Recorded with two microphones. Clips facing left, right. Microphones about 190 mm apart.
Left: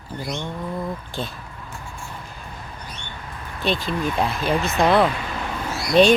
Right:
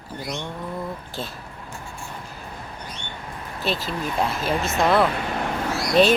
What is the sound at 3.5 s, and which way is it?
Speech, 5° right (ahead or behind).